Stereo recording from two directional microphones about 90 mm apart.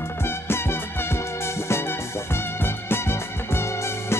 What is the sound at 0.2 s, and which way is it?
Music, 25° left (ahead or behind).